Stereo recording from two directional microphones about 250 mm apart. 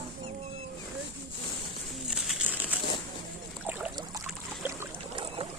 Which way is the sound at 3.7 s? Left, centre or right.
Centre.